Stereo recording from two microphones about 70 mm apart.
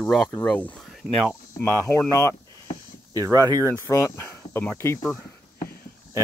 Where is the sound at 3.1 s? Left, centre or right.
Right.